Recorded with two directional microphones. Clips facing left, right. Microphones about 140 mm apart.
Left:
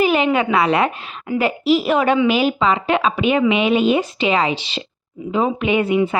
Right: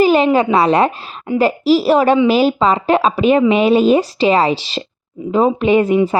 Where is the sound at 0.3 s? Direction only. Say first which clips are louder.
Right 4 dB; 35° right (ahead or behind).